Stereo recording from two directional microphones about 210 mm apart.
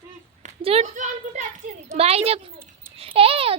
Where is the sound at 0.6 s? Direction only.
30° right (ahead or behind).